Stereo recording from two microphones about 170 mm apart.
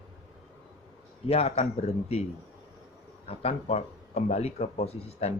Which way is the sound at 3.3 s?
35° left (ahead or behind).